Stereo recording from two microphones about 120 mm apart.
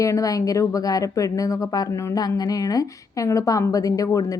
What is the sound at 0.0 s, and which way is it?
Speech, 25° left (ahead or behind).